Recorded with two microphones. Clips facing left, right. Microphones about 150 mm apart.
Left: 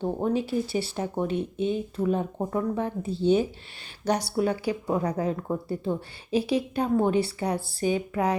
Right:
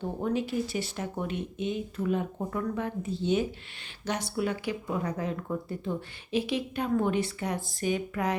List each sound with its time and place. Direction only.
0.0 s speech: 30° left (ahead or behind)